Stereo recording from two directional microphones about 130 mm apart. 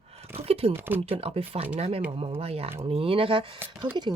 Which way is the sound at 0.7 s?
15° right (ahead or behind).